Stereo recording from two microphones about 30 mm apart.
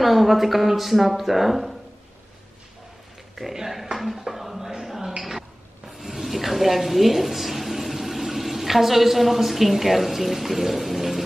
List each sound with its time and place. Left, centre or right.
0.0 s speech: centre
3.5 s speech: centre
4.3 s music: centre
4.6 s a sound: centre
5.9 s speech: centre